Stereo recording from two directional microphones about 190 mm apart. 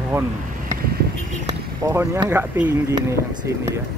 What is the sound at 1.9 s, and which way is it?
Speech, 15° right (ahead or behind).